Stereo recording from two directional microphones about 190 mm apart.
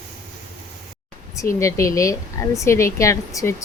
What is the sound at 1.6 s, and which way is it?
Speech, 15° left (ahead or behind).